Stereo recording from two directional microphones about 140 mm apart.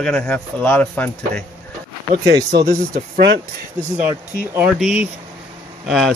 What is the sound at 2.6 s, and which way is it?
Speech, 90° right.